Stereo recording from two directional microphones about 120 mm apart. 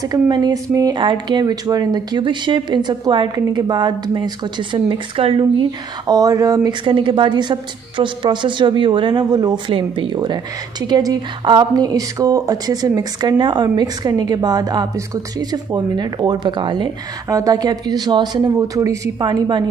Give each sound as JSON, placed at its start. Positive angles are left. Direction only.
{"t": 0.0, "sound": "speech", "side_deg": -35}
{"t": 6.1, "sound": "speech", "side_deg": -30}
{"t": 9.7, "sound": "speech", "side_deg": -45}